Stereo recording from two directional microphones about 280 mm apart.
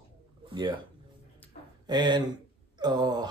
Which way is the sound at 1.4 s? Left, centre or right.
Centre.